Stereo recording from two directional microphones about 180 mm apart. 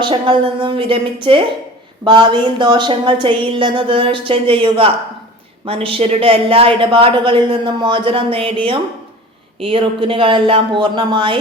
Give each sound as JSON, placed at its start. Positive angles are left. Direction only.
{"t": 0.0, "sound": "speech", "side_deg": -30}